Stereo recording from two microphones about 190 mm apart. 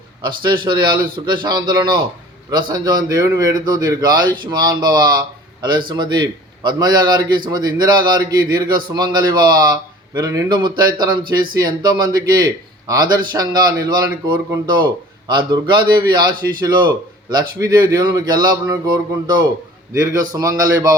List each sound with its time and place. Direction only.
0.2 s a man's voice: 25° right (ahead or behind)